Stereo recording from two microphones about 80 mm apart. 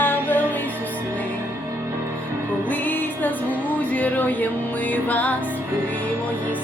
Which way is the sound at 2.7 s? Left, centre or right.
Left.